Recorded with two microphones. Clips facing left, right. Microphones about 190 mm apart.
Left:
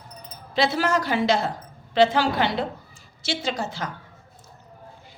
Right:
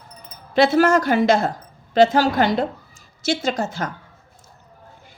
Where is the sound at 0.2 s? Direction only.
50° right (ahead or behind).